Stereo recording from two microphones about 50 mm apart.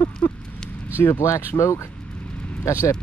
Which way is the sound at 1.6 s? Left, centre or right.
Left.